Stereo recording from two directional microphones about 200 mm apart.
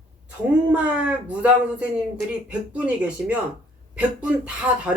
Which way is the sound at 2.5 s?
5° right (ahead or behind).